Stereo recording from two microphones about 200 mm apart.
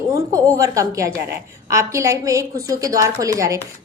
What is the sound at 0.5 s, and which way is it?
A woman's voice, 15° right (ahead or behind).